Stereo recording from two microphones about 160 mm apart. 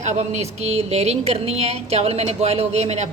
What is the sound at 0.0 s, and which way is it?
A woman's voice, 45° right (ahead or behind).